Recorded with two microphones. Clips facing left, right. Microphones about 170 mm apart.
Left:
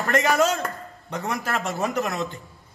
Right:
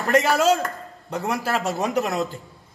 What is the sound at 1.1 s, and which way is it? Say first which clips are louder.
Speech: right 3 dB; 5° right (ahead or behind).